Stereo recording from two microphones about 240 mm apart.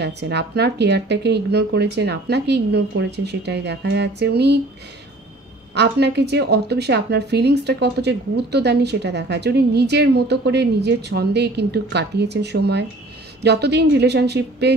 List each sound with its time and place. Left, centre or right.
0.0 s a woman's voice: right
5.8 s a woman's voice: right